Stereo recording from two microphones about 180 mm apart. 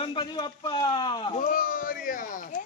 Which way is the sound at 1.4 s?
50° left (ahead or behind).